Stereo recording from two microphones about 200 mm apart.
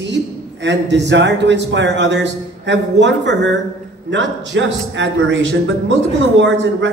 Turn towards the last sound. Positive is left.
turn(degrees=-65)  # may be behind; listen again after turning